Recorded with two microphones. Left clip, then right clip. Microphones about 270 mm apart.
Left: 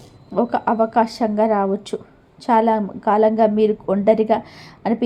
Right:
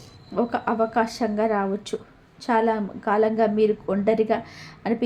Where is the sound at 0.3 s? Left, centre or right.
Centre.